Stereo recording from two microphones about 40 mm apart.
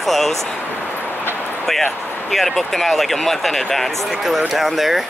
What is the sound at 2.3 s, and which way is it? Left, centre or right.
Speech, centre.